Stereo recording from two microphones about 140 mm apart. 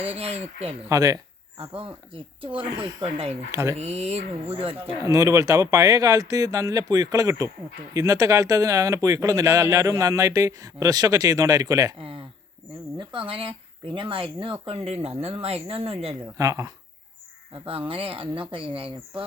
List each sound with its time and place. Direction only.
0.0 s speech: 45° right (ahead or behind)
0.9 s speech: 25° right (ahead or behind)
1.5 s speech: 40° right (ahead or behind)
2.5 s speech: 10° right (ahead or behind)
3.8 s speech: 50° right (ahead or behind)
5.0 s speech: 25° right (ahead or behind)
11.9 s speech: 40° right (ahead or behind)
16.4 s speech: 25° right (ahead or behind)
17.5 s speech: 40° right (ahead or behind)